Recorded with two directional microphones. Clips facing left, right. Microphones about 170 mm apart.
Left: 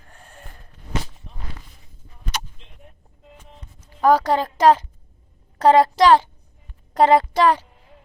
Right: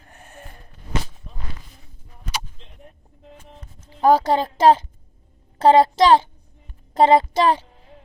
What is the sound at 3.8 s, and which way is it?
A woman's voice, 25° right (ahead or behind).